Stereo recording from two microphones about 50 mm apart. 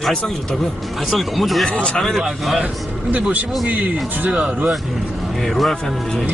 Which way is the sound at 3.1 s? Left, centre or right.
Right.